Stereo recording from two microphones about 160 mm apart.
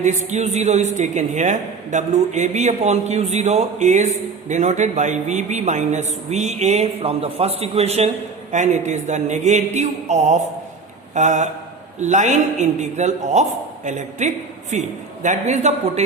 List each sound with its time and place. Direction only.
0.0 s a woman's voice: 50° right (ahead or behind)